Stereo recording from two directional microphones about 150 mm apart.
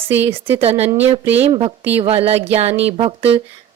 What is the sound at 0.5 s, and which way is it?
Speech, 40° right (ahead or behind).